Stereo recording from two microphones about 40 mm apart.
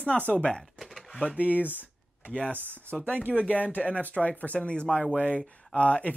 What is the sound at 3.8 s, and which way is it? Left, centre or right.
Speech, left.